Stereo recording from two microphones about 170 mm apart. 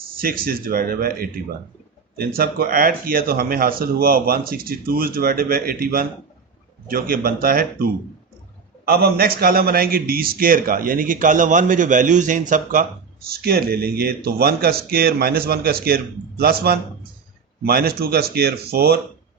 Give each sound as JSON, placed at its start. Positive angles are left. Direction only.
{"t": 0.2, "sound": "a man's voice", "side_deg": -60}
{"t": 13.2, "sound": "a man's voice", "side_deg": -65}